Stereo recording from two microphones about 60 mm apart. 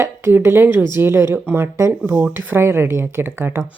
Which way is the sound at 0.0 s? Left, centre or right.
Right.